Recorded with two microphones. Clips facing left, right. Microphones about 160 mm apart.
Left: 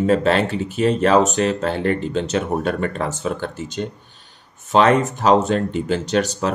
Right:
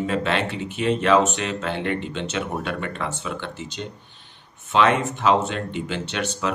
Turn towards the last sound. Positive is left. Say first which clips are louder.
# left 6 dB
turn(degrees=40)  # may be behind; listen again after turning